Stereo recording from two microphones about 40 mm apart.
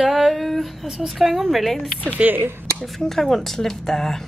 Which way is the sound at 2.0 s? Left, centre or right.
Right.